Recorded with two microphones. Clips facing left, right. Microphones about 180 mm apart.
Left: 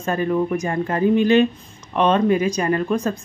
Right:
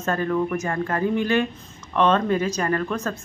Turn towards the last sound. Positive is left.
turn(degrees=15)  # may be behind; listen again after turning